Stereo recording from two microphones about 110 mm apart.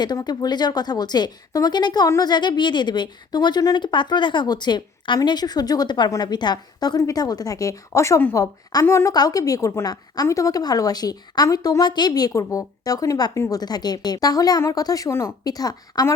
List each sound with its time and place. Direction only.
0.3 s a woman's voice: 40° left (ahead or behind)